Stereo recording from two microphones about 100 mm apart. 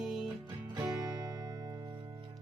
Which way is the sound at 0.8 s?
45° right (ahead or behind).